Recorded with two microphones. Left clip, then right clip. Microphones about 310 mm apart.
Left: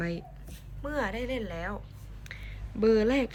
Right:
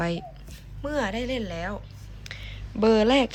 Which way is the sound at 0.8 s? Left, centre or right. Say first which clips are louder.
Right 4 dB; centre.